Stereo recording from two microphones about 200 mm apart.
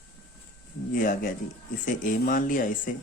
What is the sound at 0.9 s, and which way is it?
Speech, 45° left (ahead or behind).